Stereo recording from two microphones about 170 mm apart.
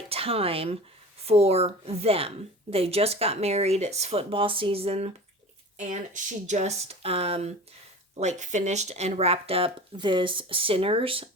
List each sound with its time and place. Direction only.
0.1 s a woman's voice: 35° right (ahead or behind)